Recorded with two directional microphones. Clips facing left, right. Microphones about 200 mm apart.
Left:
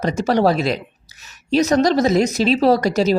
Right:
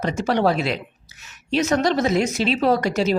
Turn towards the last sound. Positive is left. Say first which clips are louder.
# left 4 dB
turn(degrees=40)  # may be behind; listen again after turning